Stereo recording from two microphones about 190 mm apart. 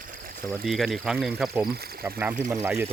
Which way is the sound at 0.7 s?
Centre (ahead or behind).